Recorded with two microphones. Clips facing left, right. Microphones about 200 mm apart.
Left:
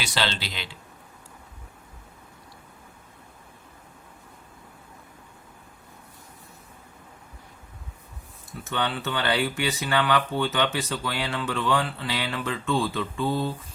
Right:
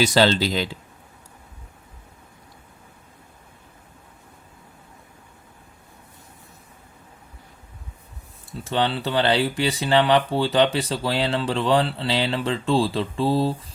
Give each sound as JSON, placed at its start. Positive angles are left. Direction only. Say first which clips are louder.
{"t": 0.0, "sound": "speech", "louder": "right 11 dB", "side_deg": -40}
{"t": 8.6, "sound": "speech", "louder": "right 5 dB", "side_deg": -30}